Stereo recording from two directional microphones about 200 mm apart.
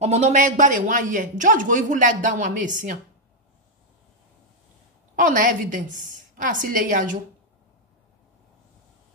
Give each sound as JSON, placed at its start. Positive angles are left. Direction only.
{"t": 0.0, "sound": "speech", "side_deg": -35}
{"t": 5.2, "sound": "a woman's voice", "side_deg": -40}